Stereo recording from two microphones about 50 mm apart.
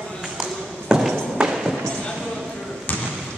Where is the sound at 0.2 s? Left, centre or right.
Centre.